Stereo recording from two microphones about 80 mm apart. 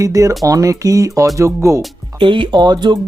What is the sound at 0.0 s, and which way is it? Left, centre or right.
Speech, right.